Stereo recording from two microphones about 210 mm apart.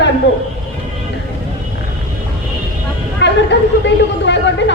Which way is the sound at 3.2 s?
55° left (ahead or behind).